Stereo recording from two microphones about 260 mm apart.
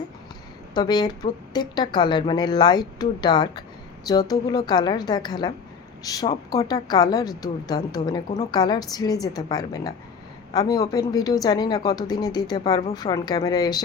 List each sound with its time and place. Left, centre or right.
0.7 s a woman's voice: centre